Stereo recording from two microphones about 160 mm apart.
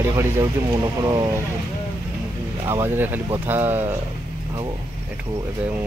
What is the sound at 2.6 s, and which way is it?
Speech, 15° right (ahead or behind).